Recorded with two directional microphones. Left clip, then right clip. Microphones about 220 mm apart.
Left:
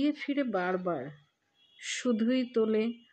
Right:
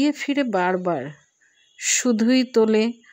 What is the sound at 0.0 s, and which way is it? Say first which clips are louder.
Speech: right 9 dB; 40° right (ahead or behind).